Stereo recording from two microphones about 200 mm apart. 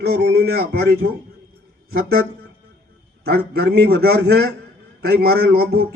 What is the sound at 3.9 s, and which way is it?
A man's voice, 50° right (ahead or behind).